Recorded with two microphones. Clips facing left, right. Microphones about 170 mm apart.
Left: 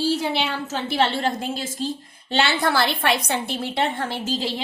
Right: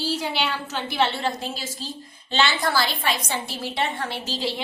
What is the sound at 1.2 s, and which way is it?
A woman's voice, 50° left (ahead or behind).